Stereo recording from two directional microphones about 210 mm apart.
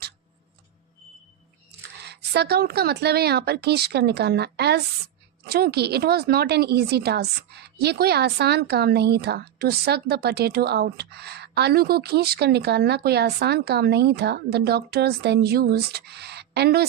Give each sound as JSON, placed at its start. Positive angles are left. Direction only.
{"t": 2.0, "sound": "speech", "side_deg": -50}